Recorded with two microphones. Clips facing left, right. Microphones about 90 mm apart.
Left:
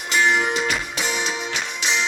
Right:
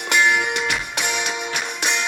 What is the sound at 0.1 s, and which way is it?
Music, 60° right (ahead or behind).